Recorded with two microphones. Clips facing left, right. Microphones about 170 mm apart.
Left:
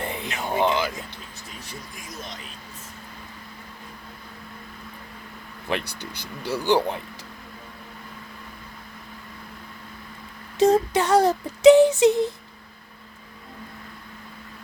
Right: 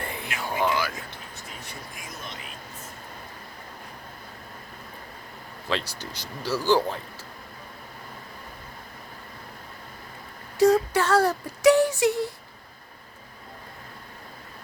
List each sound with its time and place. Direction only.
0.0 s a sound: 20° left (ahead or behind)
5.9 s speech: 60° left (ahead or behind)
6.6 s speech: 20° left (ahead or behind)
10.6 s child singing: 20° left (ahead or behind)